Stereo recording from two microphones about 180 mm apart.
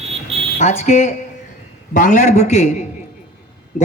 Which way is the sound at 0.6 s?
40° left (ahead or behind).